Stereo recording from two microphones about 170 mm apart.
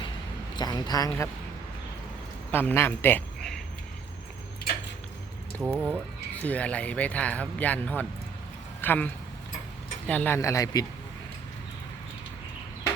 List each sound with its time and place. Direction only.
0.5 s speech: 25° left (ahead or behind)
2.5 s speech: 10° left (ahead or behind)
5.5 s speech: 10° right (ahead or behind)
6.3 s speech: 10° left (ahead or behind)